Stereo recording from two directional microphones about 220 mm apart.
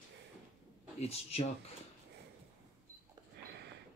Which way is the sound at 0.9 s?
30° left (ahead or behind).